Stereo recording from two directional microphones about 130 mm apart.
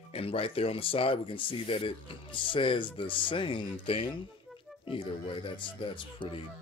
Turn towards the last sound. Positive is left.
turn(degrees=40)  # may be behind; listen again after turning